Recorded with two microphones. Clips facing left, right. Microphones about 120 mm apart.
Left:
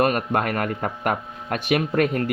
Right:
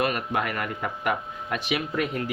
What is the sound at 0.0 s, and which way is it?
Speech, 50° left (ahead or behind).